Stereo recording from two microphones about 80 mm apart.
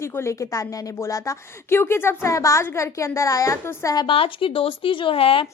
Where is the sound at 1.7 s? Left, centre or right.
Left.